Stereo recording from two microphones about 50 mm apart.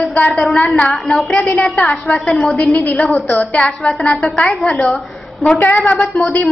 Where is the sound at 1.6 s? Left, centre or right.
Left.